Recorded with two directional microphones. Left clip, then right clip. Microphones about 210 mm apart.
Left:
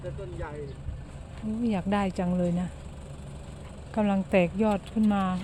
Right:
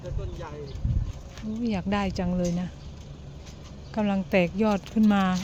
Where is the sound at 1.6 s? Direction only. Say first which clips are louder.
Even; centre (ahead or behind).